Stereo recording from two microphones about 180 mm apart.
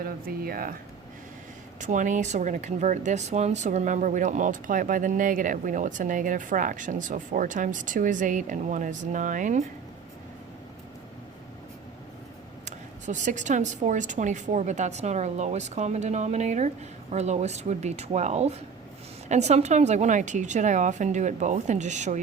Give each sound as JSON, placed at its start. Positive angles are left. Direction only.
{"t": 0.0, "sound": "speech", "side_deg": -55}
{"t": 1.8, "sound": "speech", "side_deg": -45}
{"t": 12.6, "sound": "speech", "side_deg": -45}